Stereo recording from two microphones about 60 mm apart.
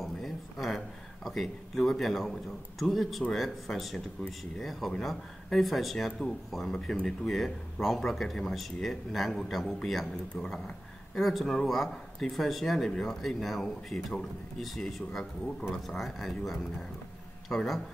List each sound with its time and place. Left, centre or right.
0.0 s a sound: centre
2.8 s speech: centre
10.3 s speech: centre
11.1 s speech: centre